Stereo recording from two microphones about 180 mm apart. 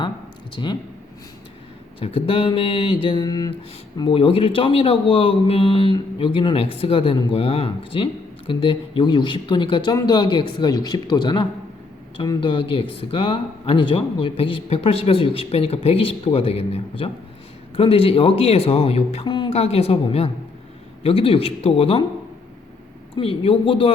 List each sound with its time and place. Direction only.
0.5 s a man's voice: 25° left (ahead or behind)
2.0 s a man's voice: 30° left (ahead or behind)
23.1 s speech: 30° left (ahead or behind)